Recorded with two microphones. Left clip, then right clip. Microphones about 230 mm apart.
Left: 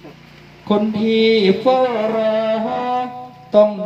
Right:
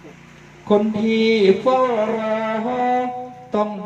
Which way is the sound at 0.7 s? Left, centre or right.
Left.